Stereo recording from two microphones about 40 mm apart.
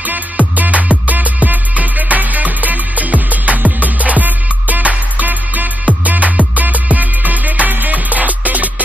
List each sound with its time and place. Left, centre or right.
0.0 s music: right